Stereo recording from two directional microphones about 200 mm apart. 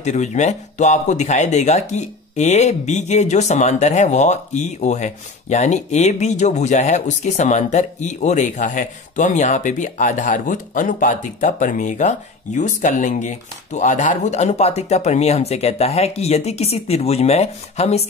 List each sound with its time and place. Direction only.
0.0 s speech: 35° left (ahead or behind)